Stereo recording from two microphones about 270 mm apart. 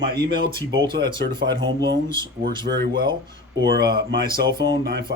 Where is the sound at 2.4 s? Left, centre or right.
Right.